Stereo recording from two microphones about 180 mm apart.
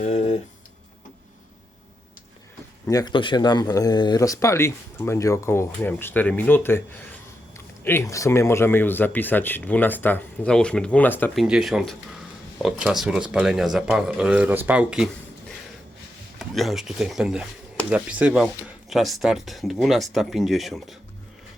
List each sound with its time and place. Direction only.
2.8 s speech: 20° left (ahead or behind)
11.4 s speech: 5° right (ahead or behind)